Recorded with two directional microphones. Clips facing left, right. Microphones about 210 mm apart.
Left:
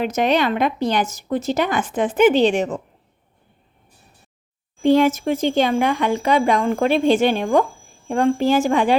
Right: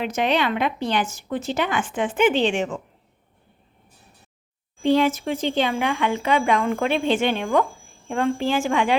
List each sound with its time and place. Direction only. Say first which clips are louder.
0.0 s speech: left 4 dB; 40° left (ahead or behind)
4.8 s speech: left 4 dB; 45° left (ahead or behind)